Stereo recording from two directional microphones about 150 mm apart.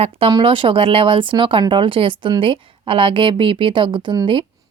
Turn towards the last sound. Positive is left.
turn(degrees=-30)  # may be behind; listen again after turning